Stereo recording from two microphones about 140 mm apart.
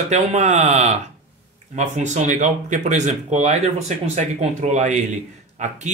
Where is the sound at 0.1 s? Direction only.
55° right (ahead or behind).